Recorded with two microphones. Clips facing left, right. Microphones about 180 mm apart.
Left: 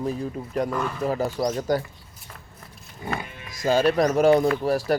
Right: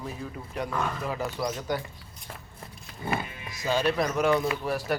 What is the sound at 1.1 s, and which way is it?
Speech, 40° left (ahead or behind).